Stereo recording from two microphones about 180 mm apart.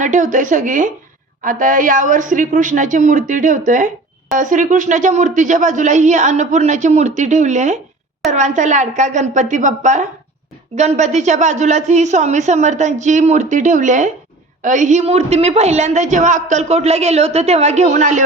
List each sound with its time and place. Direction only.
0.0 s a woman's voice: 45° right (ahead or behind)